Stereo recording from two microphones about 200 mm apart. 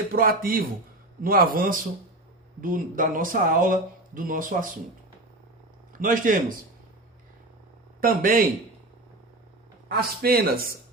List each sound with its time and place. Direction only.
0.1 s speech: 45° right (ahead or behind)
5.9 s a man's voice: 45° right (ahead or behind)
8.0 s speech: 45° right (ahead or behind)
9.9 s speech: 50° right (ahead or behind)